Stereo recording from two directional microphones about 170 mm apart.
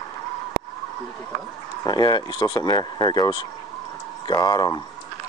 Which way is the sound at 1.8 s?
25° left (ahead or behind).